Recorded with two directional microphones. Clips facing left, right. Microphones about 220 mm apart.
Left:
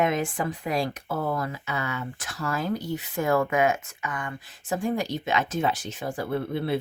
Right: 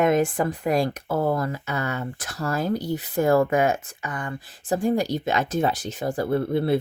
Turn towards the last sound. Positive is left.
turn(degrees=-40)  # may be behind; listen again after turning